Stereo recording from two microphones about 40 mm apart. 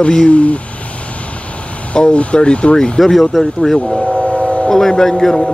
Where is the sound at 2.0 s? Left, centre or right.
Left.